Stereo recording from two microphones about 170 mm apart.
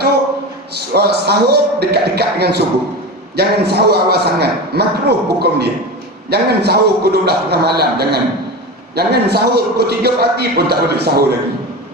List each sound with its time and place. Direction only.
0.9 s a man's voice: 70° right (ahead or behind)